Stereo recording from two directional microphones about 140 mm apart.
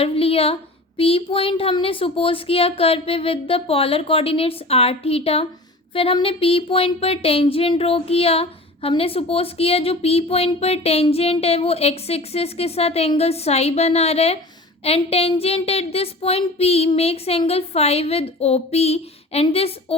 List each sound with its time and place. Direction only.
0.0 s speech: 45° left (ahead or behind)